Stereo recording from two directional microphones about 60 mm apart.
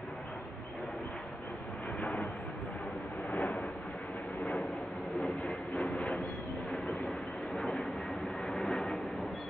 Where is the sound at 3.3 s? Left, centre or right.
Centre.